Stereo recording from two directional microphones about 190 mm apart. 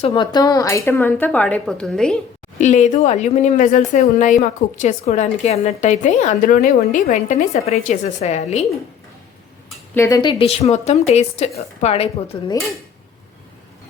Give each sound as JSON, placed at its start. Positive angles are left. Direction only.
{"t": 0.0, "sound": "speech", "side_deg": 25}
{"t": 2.6, "sound": "speech", "side_deg": 40}
{"t": 9.9, "sound": "speech", "side_deg": 15}
{"t": 12.3, "sound": "dishes", "side_deg": 25}